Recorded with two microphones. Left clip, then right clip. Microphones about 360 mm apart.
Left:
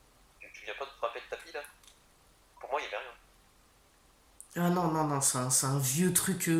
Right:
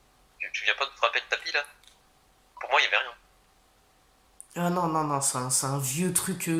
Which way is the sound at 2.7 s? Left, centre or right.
Right.